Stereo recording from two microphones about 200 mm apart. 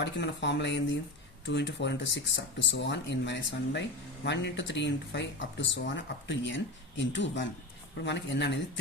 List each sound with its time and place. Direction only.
0.0 s speech: 60° left (ahead or behind)